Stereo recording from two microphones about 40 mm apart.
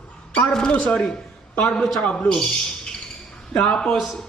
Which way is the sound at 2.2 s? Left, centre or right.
Centre.